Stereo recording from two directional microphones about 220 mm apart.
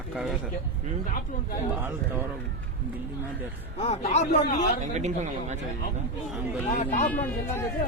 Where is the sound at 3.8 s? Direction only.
30° left (ahead or behind).